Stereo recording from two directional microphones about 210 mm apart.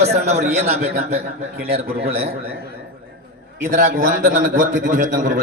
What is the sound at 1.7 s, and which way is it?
Speech, 45° right (ahead or behind).